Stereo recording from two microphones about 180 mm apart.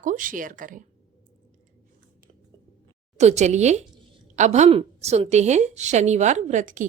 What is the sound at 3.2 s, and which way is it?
A woman's voice, 40° right (ahead or behind).